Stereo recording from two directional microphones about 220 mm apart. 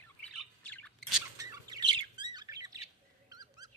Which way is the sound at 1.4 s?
15° right (ahead or behind).